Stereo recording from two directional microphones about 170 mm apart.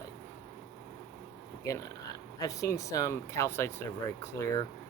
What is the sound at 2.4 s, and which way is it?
Speech, 20° left (ahead or behind).